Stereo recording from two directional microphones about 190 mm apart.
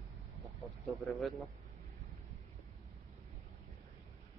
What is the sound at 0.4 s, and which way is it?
Vehicle, centre (ahead or behind).